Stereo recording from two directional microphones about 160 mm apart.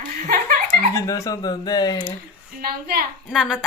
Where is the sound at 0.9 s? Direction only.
20° left (ahead or behind).